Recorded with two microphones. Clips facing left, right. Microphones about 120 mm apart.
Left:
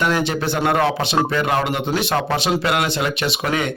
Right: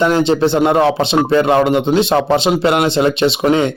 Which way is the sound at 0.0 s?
25° right (ahead or behind).